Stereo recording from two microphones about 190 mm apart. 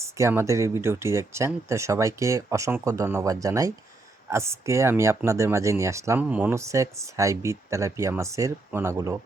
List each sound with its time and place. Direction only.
0.0 s speech: 15° right (ahead or behind)